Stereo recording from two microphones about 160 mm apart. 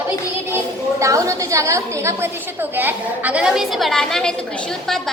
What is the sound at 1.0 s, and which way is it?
A woman's voice, 20° right (ahead or behind).